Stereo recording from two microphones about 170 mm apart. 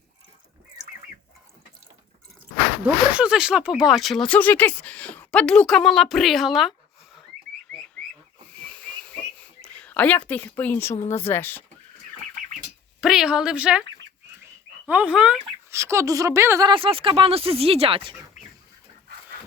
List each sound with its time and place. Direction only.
2.8 s speech: 5° right (ahead or behind)
7.7 s frog: 5° left (ahead or behind)
8.7 s whistle: 5° left (ahead or behind)
9.7 s a woman's voice: 10° left (ahead or behind)
13.0 s speech: 5° right (ahead or behind)
14.8 s a woman's voice: 10° right (ahead or behind)
15.7 s a woman's voice: 15° right (ahead or behind)
16.6 s speech: 30° right (ahead or behind)